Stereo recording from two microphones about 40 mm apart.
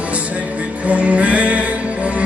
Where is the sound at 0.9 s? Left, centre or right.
Right.